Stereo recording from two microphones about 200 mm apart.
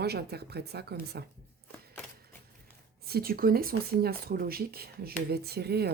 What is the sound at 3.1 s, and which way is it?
Speech, 50° right (ahead or behind).